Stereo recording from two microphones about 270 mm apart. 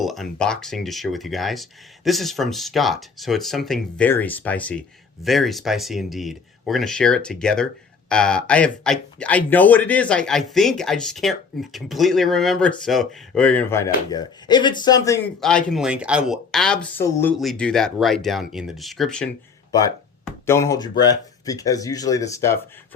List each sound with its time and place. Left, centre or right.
0.0 s speech: centre